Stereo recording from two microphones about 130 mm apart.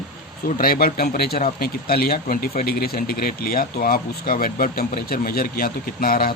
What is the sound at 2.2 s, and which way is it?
Speech, 90° left.